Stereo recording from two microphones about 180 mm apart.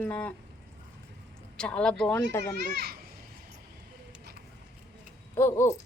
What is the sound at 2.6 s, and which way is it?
Speech, 60° right (ahead or behind).